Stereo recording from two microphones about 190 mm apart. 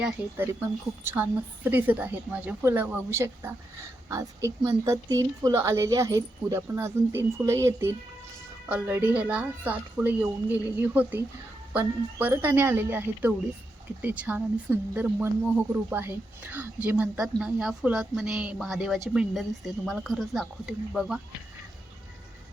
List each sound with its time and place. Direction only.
1.0 s a woman's voice: 10° right (ahead or behind)